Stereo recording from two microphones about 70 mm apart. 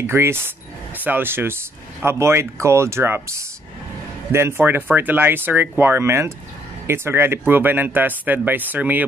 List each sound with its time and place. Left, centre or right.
0.0 s speech: right